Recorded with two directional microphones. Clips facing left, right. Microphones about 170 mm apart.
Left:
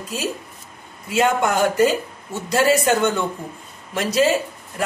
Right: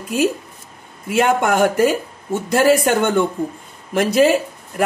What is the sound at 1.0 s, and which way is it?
Speech, 55° right (ahead or behind).